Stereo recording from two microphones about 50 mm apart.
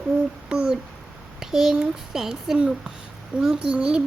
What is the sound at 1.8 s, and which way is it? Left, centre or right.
A child's voice, centre.